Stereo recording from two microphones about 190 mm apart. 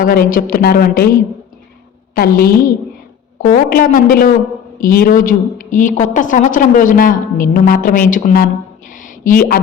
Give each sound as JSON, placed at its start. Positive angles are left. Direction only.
{"t": 0.0, "sound": "a woman's voice", "side_deg": 50}
{"t": 2.1, "sound": "a woman's voice", "side_deg": 50}